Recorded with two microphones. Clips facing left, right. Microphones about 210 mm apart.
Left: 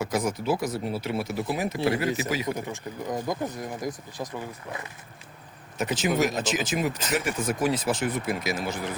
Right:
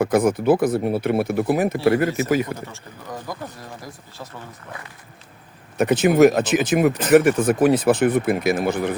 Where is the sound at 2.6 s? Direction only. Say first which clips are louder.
Left 5 dB; 20° left (ahead or behind).